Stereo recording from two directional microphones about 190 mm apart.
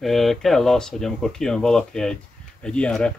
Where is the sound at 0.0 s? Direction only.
Centre (ahead or behind).